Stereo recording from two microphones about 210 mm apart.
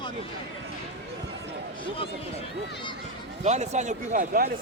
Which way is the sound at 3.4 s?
30° right (ahead or behind).